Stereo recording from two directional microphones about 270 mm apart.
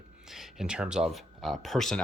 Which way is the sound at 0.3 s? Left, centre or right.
Centre.